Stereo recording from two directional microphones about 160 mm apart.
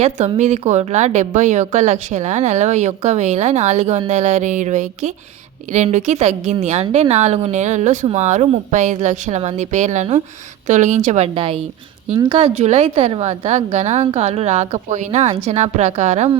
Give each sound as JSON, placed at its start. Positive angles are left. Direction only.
{"t": 0.3, "sound": "a woman's voice", "side_deg": -45}